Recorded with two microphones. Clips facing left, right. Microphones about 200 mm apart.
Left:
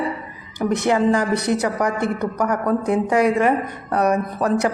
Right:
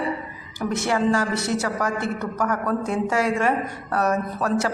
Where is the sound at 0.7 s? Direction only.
20° left (ahead or behind).